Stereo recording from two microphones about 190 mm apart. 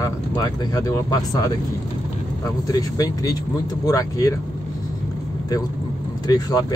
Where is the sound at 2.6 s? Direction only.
20° left (ahead or behind).